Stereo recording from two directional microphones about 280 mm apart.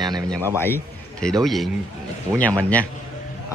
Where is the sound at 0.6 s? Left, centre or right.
Centre.